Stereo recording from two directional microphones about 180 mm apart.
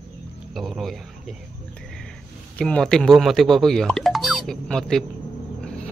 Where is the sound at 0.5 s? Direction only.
Centre (ahead or behind).